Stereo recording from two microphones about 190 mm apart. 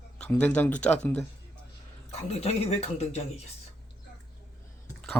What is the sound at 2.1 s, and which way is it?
Speech, 35° left (ahead or behind).